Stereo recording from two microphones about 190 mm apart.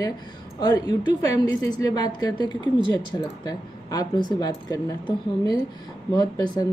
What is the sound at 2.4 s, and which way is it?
Speech, 25° right (ahead or behind).